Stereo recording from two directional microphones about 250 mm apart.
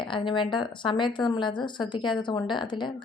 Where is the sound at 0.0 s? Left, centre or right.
Centre.